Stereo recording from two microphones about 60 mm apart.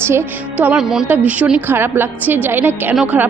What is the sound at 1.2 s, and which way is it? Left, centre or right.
A woman's voice, right.